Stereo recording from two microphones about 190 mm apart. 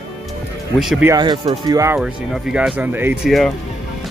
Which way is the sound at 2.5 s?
5° right (ahead or behind).